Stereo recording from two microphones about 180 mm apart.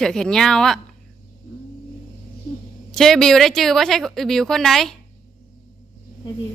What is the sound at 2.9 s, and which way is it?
A woman's voice, centre (ahead or behind).